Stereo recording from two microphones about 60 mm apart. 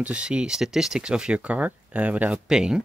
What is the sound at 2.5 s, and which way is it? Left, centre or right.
Speech, centre.